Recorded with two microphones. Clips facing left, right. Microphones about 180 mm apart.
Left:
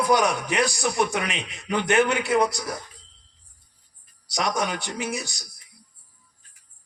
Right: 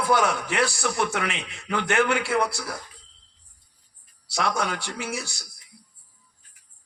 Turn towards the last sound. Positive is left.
turn(degrees=20)  # may be behind; listen again after turning